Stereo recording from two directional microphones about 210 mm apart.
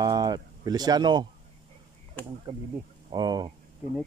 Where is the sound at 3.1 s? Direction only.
20° right (ahead or behind).